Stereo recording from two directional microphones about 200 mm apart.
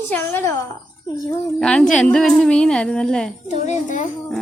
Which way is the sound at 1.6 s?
5° left (ahead or behind).